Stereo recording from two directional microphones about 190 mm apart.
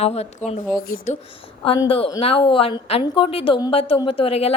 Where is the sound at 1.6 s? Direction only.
30° left (ahead or behind).